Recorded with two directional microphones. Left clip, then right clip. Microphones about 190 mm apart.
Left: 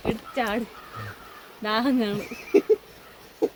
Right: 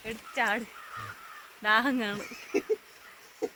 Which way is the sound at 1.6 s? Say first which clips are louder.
Left 1 dB; centre (ahead or behind).